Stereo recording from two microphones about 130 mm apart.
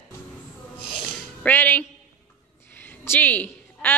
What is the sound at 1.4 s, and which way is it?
Speech, 15° left (ahead or behind).